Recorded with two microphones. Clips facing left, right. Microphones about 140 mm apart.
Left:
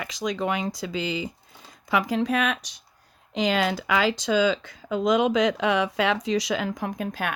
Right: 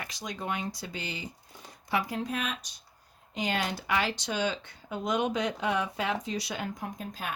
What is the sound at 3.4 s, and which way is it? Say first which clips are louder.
A woman's voice: left 8 dB; 90° left.